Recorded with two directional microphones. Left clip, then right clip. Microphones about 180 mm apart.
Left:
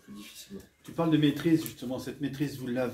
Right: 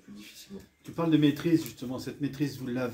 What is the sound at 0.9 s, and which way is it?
Speech, 70° right (ahead or behind).